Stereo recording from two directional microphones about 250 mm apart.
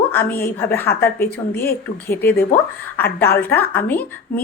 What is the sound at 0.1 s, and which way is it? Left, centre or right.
A woman's voice, centre.